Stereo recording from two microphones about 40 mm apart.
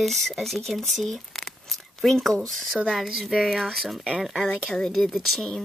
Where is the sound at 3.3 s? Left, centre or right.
Centre.